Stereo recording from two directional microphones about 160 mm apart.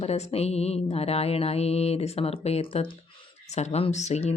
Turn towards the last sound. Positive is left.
turn(degrees=45)  # may be behind; listen again after turning